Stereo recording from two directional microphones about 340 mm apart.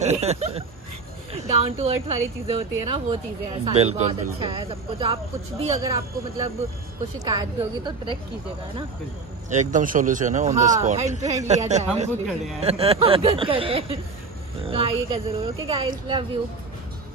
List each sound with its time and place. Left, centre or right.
0.0 s speech: centre
9.5 s speech: right